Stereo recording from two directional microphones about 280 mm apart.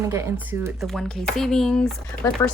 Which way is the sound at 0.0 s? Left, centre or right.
Centre.